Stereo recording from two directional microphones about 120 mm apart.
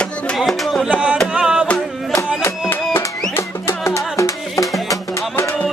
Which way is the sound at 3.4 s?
25° left (ahead or behind).